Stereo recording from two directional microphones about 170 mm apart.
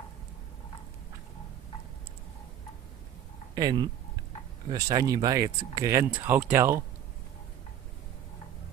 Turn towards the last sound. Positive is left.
turn(degrees=-15)  # may be behind; listen again after turning